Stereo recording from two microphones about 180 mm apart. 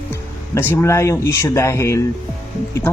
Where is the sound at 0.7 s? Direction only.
15° left (ahead or behind).